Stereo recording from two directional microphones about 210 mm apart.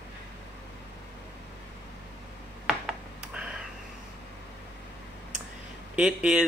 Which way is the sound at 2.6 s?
5° right (ahead or behind).